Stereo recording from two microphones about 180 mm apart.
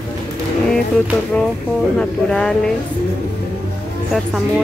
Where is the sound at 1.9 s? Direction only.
5° left (ahead or behind).